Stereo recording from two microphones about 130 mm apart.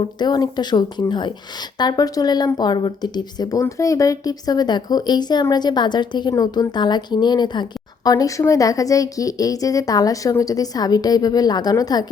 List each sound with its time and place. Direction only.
0.0 s speech: 35° left (ahead or behind)